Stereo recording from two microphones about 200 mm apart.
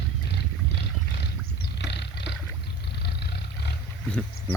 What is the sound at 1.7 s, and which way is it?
Roaring cats, 55° left (ahead or behind).